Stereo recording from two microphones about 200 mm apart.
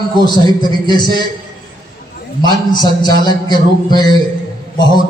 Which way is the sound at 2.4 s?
20° left (ahead or behind).